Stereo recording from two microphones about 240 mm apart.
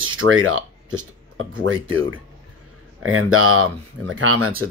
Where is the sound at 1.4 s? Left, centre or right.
Right.